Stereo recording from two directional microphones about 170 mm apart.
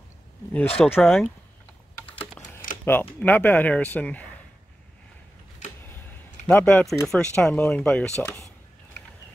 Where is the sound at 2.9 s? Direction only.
10° left (ahead or behind).